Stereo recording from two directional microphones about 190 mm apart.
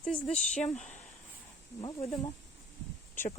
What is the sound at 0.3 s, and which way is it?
Speech, 35° left (ahead or behind).